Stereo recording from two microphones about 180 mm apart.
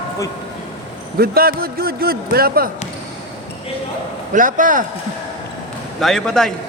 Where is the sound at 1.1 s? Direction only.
55° right (ahead or behind).